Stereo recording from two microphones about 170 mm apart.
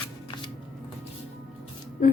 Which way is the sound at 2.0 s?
50° left (ahead or behind).